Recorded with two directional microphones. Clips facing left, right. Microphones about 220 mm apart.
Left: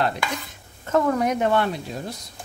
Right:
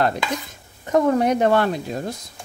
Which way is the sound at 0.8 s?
15° right (ahead or behind).